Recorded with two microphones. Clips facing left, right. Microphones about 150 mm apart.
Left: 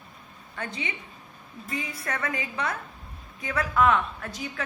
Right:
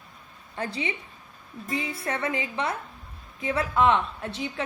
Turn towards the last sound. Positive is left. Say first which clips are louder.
# right 3 dB
turn(degrees=-25)  # may be behind; listen again after turning